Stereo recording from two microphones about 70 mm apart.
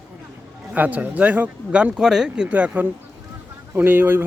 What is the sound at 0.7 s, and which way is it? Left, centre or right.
Speech, right.